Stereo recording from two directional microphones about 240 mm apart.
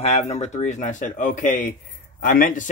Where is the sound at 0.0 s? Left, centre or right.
Left.